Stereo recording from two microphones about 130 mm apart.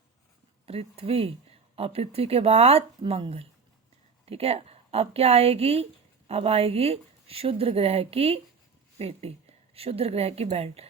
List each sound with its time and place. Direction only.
0.6 s a woman's voice: 50° right (ahead or behind)